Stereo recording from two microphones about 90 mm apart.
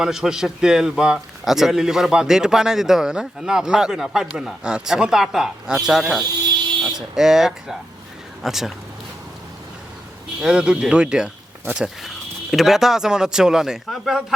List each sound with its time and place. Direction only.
0.0 s a man's voice: 5° right (ahead or behind)
10.4 s a man's voice: 10° right (ahead or behind)